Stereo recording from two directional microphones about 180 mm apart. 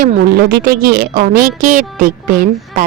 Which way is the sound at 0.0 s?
55° right (ahead or behind).